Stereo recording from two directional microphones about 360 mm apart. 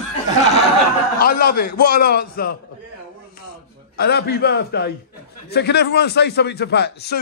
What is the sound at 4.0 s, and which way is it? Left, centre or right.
A man's voice, left.